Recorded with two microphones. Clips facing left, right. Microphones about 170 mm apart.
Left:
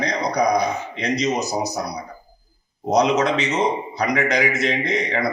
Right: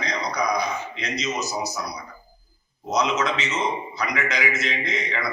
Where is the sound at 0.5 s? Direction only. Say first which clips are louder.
Left 5 dB; 50° left (ahead or behind).